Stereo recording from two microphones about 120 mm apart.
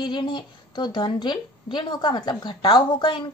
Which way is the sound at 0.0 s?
40° left (ahead or behind).